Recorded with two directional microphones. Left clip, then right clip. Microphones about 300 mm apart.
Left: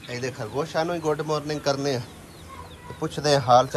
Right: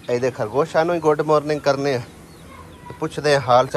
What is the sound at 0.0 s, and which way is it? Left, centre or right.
A man's voice, centre.